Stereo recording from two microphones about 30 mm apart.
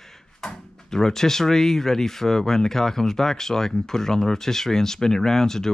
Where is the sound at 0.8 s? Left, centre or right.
Centre.